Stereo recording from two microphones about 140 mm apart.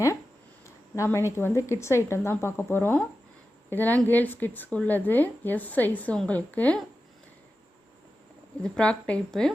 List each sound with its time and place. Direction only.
0.6 s a woman's voice: 20° left (ahead or behind)
8.6 s a woman's voice: 5° left (ahead or behind)